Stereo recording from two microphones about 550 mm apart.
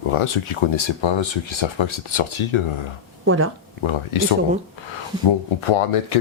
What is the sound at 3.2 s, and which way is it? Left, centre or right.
Speech, right.